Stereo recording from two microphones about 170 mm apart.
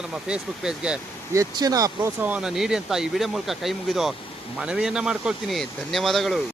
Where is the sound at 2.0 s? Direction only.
10° right (ahead or behind).